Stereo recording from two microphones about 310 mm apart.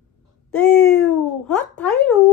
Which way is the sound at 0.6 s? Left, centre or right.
Centre.